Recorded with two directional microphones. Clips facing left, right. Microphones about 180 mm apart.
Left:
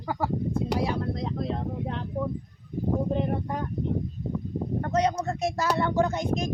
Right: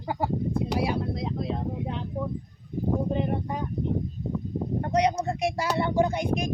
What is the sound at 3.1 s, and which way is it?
Speech, 5° right (ahead or behind).